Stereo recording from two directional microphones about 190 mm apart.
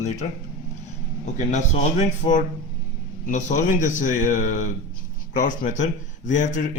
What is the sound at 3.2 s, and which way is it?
A man's voice, 40° left (ahead or behind).